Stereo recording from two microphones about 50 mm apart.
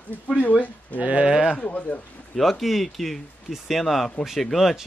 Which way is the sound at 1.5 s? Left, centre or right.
Left.